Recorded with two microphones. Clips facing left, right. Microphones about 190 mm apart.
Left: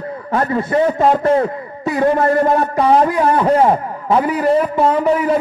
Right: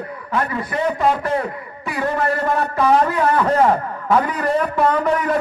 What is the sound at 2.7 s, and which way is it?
A man's voice, 30° left (ahead or behind).